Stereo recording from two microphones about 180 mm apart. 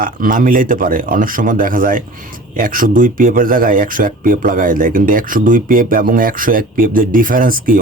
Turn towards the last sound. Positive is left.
turn(degrees=-50)  # may be behind; listen again after turning